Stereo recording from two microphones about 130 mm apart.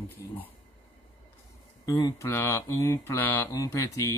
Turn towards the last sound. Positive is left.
turn(degrees=25)  # may be behind; listen again after turning